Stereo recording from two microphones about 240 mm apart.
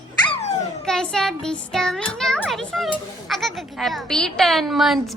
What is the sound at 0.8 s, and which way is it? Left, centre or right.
A child's voice, centre.